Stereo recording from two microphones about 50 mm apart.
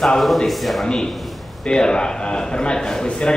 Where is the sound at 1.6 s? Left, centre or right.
Centre.